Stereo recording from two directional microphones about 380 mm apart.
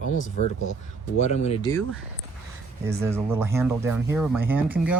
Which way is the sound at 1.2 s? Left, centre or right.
Centre.